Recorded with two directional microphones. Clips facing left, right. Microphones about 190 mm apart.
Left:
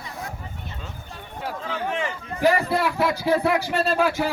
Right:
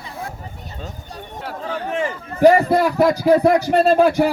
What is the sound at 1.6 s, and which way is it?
A man's voice, 45° right (ahead or behind).